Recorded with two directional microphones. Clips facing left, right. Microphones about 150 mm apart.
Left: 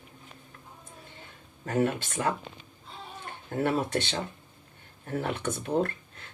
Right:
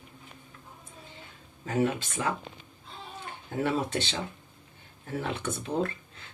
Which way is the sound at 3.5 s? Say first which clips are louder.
Left 1 dB; 55° left (ahead or behind).